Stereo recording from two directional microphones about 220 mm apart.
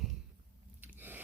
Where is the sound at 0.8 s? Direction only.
5° right (ahead or behind).